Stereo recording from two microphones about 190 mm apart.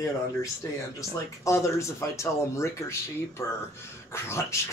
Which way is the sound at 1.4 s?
15° left (ahead or behind).